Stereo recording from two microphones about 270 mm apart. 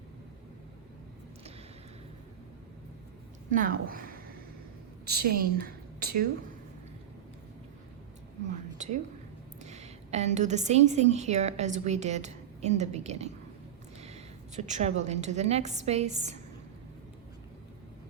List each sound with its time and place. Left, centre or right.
3.5 s a woman's voice: right
9.6 s a woman's voice: right
14.0 s a sound: right
15.0 s a woman's voice: right